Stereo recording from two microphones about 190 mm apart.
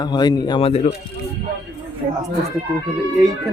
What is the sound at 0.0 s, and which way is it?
Speech, 20° left (ahead or behind).